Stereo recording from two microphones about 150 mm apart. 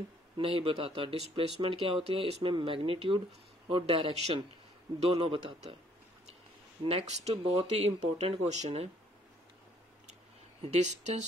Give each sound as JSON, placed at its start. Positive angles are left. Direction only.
{"t": 0.4, "sound": "speech", "side_deg": -40}
{"t": 6.8, "sound": "speech", "side_deg": -40}
{"t": 10.7, "sound": "speech", "side_deg": -50}